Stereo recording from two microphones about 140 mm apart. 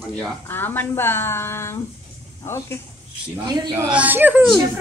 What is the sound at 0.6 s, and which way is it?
Speech, 15° left (ahead or behind).